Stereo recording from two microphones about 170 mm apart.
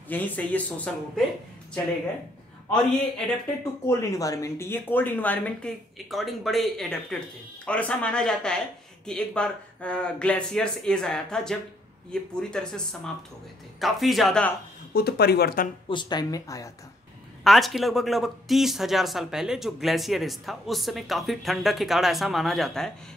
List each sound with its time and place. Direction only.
0.1 s speech: 10° left (ahead or behind)
3.8 s speech: 20° left (ahead or behind); by 14.5 s 5° left (ahead or behind)
15.0 s speech: 70° left (ahead or behind)
15.9 s speech: 25° left (ahead or behind)
17.4 s speech: centre (ahead or behind)